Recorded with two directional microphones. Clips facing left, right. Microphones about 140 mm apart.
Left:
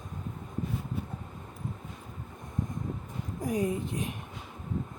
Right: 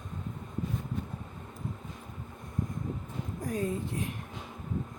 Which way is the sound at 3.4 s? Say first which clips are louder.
Left 3 dB; 15° left (ahead or behind).